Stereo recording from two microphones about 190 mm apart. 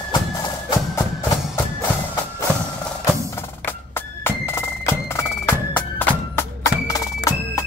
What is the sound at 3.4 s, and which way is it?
Music, 10° left (ahead or behind).